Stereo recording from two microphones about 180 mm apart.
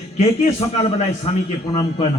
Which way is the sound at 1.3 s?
35° left (ahead or behind).